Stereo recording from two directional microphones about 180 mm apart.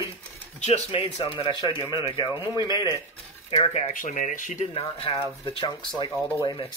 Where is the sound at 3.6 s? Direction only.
35° left (ahead or behind).